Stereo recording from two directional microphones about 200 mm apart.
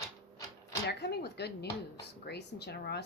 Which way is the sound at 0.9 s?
55° left (ahead or behind).